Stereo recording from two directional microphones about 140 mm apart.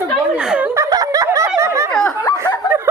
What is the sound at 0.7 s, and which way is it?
Snicker, 25° right (ahead or behind).